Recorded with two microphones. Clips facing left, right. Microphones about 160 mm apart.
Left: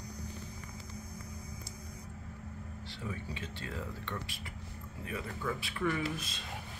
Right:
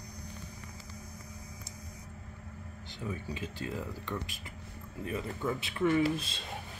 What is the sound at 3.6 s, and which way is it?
Speech, 15° right (ahead or behind).